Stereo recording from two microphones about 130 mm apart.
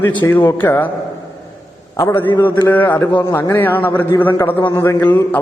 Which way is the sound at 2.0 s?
20° left (ahead or behind).